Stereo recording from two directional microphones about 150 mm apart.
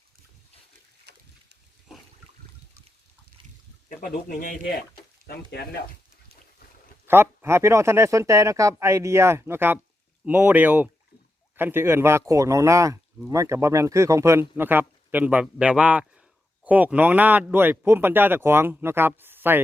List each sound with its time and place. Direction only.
1.1 s boat: 90° right
4.0 s speech: 80° left
5.2 s speech: 90° left
7.1 s speech: 15° right (ahead or behind)